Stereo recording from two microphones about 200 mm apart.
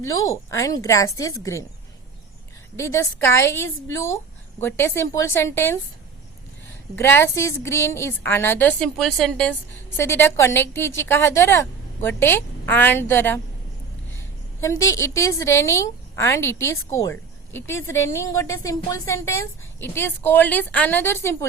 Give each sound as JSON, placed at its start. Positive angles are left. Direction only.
{"t": 0.0, "sound": "a woman's voice", "side_deg": 15}
{"t": 2.7, "sound": "a woman's voice", "side_deg": 15}
{"t": 6.9, "sound": "a woman's voice", "side_deg": 10}
{"t": 14.6, "sound": "a woman's voice", "side_deg": 15}